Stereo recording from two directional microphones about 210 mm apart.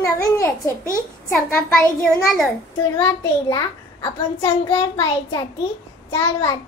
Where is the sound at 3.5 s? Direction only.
20° left (ahead or behind).